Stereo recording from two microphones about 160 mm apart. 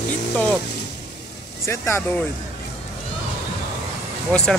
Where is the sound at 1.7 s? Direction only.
15° left (ahead or behind).